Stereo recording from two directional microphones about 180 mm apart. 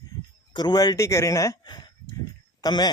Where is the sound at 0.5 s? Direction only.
25° left (ahead or behind).